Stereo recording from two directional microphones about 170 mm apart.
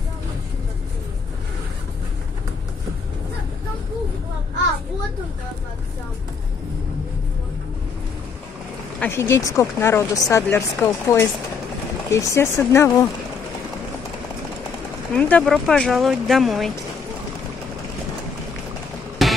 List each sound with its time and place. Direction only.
9.0 s speech: 15° left (ahead or behind)
15.1 s speech: 10° left (ahead or behind)
19.2 s music: centre (ahead or behind)